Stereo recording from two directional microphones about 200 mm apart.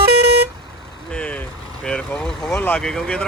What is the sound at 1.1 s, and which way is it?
Vehicle, 5° left (ahead or behind).